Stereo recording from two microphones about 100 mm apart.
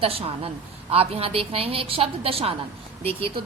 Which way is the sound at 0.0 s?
75° right (ahead or behind).